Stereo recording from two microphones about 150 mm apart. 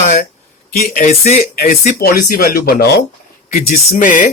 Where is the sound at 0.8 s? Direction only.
75° left (ahead or behind).